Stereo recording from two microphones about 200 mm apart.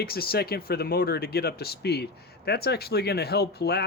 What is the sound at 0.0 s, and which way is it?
Speech, 50° left (ahead or behind).